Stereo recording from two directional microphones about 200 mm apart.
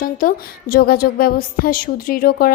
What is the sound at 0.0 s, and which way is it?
Speech, 45° left (ahead or behind).